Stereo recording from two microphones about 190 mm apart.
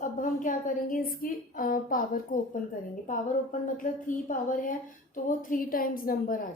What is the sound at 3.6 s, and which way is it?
A woman's voice, 45° left (ahead or behind).